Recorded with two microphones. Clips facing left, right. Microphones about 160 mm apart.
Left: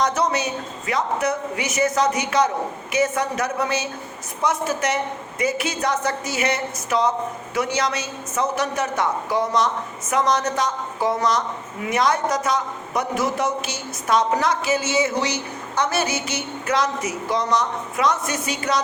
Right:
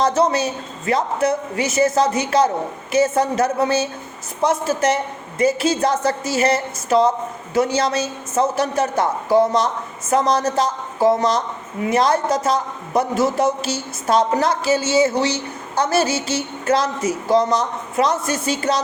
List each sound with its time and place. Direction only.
0.0 s a woman's voice: 30° right (ahead or behind)